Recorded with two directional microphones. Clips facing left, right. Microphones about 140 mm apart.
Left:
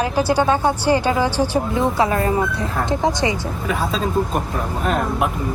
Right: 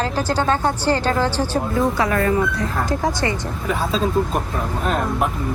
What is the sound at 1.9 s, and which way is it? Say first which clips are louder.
Speech: left 1 dB; 25° left (ahead or behind).